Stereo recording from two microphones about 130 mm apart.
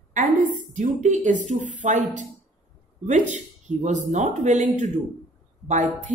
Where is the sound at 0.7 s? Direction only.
65° right (ahead or behind).